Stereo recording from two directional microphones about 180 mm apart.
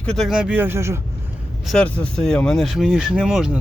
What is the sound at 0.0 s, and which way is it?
Speech, 5° left (ahead or behind).